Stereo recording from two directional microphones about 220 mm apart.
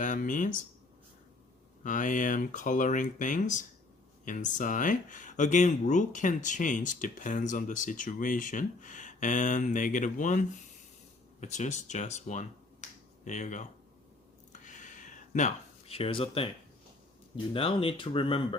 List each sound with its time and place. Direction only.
0.0 s speech: 35° left (ahead or behind)
1.8 s speech: 35° left (ahead or behind)
14.5 s a sound: 35° left (ahead or behind)
17.3 s speech: 25° left (ahead or behind)